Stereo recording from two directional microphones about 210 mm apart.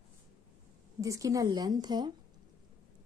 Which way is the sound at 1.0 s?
15° right (ahead or behind).